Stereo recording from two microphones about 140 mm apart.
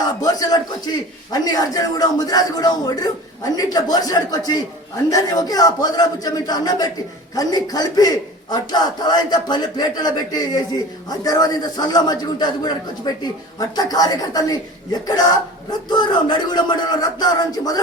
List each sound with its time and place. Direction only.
0.2 s speech: 25° left (ahead or behind)